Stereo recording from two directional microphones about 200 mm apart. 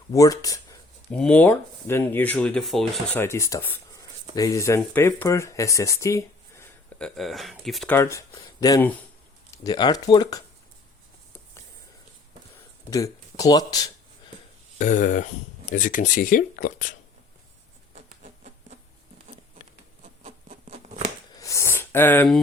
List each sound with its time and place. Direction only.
0.1 s speech: 15° left (ahead or behind)
1.1 s speech: 5° left (ahead or behind)
7.9 s speech: 15° left (ahead or behind)
12.9 s speech: 15° left (ahead or behind)
14.8 s speech: 40° left (ahead or behind)
17.9 s a sound: 35° right (ahead or behind)
20.2 s patter: 30° right (ahead or behind)
21.3 s a sound: 15° left (ahead or behind)